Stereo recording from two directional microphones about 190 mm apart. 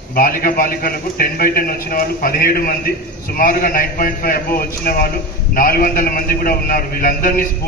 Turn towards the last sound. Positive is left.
turn(degrees=50)  # may be behind; listen again after turning